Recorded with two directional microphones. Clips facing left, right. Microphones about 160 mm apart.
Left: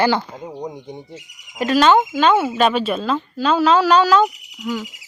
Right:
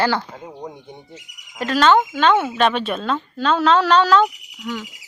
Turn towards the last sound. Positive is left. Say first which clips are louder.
# left 3 dB
turn(degrees=10)  # may be behind; listen again after turning